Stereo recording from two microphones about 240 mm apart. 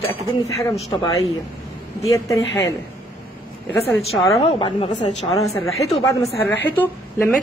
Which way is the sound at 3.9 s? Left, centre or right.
Centre.